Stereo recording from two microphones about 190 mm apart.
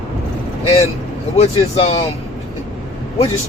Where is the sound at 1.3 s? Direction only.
35° left (ahead or behind).